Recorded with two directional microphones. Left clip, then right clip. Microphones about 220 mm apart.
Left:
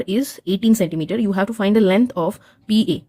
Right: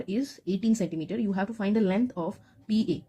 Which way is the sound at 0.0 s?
45° left (ahead or behind).